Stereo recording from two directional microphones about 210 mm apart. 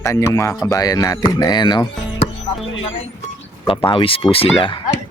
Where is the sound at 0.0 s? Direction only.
15° left (ahead or behind).